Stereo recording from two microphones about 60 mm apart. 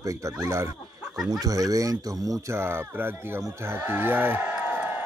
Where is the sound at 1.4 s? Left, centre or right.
Right.